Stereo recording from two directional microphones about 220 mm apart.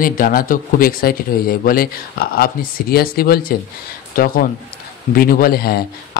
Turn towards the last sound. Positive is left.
turn(degrees=45)  # may be behind; listen again after turning